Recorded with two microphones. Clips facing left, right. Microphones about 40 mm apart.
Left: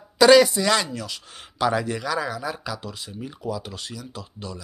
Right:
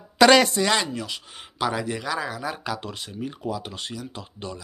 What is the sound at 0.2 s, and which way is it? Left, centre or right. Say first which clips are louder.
Speech: left 2 dB; right.